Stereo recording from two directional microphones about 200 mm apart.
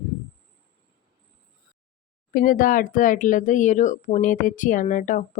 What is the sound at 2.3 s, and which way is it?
Speech, 45° left (ahead or behind).